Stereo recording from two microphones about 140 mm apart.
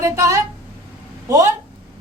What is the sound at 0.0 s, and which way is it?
Speech, 20° right (ahead or behind).